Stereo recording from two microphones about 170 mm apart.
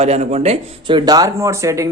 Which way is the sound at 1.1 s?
20° right (ahead or behind).